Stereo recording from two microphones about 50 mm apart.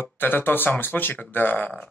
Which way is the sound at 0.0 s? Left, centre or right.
Left.